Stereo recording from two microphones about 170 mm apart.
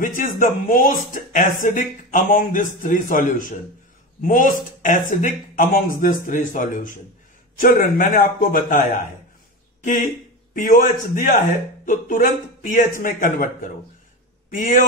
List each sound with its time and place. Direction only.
0.0 s speech: 50° left (ahead or behind)
10.5 s speech: 50° left (ahead or behind)